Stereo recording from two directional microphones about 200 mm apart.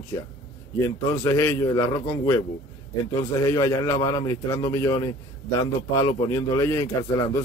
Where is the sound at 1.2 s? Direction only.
15° left (ahead or behind).